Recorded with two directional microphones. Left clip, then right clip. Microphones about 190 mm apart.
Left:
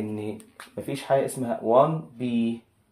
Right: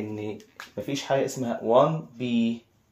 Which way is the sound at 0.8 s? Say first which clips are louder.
Left 2 dB; centre (ahead or behind).